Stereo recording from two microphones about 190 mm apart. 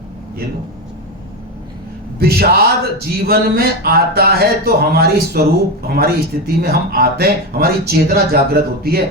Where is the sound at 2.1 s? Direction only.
55° right (ahead or behind).